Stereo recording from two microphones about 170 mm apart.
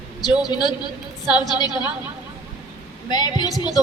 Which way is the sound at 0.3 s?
25° left (ahead or behind).